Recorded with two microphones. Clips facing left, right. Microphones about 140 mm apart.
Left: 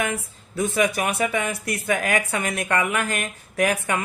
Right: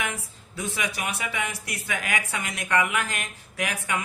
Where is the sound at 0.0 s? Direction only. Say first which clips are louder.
Left 6 dB; 50° left (ahead or behind).